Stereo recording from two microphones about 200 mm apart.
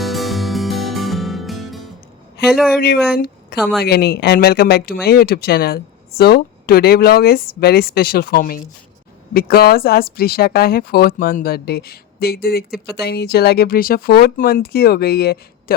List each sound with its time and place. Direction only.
0.0 s music: centre (ahead or behind)
2.5 s speech: 5° right (ahead or behind)
2.7 s speech: 50° left (ahead or behind)
3.6 s speech: centre (ahead or behind)
3.8 s speech: 55° left (ahead or behind)